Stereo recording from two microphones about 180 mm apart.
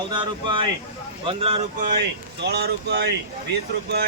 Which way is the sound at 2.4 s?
65° right (ahead or behind).